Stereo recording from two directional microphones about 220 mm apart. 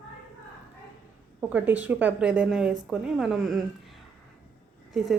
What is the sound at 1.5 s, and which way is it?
A woman's voice, 10° right (ahead or behind).